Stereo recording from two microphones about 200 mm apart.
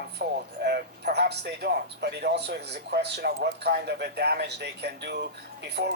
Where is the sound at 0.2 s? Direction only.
55° right (ahead or behind).